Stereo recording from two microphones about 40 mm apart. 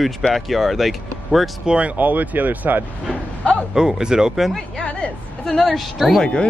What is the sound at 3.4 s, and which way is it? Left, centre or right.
Speech, left.